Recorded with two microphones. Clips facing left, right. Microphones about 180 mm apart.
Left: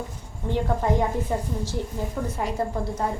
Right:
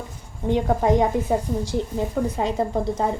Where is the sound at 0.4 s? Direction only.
15° right (ahead or behind).